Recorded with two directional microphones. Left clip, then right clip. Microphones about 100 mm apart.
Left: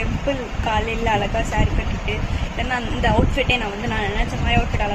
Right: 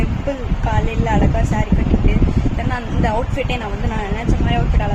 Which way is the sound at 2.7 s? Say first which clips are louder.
Left 1 dB; 20° right (ahead or behind).